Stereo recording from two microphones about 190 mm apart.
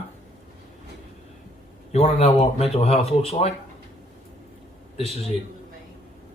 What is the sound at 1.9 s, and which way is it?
Speech, 35° left (ahead or behind).